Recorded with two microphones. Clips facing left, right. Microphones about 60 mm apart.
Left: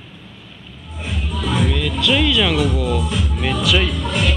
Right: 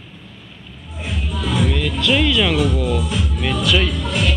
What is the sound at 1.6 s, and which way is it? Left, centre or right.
Music, centre.